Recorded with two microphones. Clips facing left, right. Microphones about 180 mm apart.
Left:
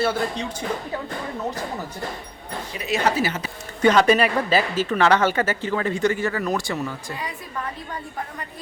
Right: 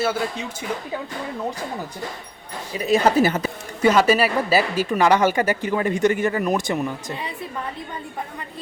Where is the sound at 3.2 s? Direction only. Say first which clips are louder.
Right 6 dB; 45° right (ahead or behind).